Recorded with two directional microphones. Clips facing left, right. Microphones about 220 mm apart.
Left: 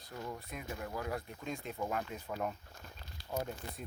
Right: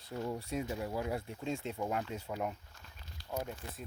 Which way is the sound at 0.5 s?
30° right (ahead or behind).